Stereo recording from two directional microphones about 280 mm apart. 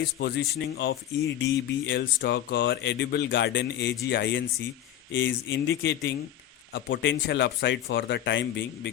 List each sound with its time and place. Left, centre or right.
0.2 s speech: left